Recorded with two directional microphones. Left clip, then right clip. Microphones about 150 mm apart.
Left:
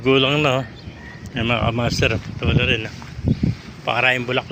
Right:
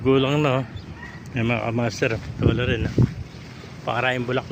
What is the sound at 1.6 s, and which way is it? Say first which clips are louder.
Speech: left 4 dB; 5° right (ahead or behind).